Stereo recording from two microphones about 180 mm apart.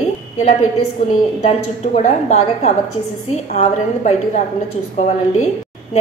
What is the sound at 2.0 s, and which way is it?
Speech, 40° left (ahead or behind).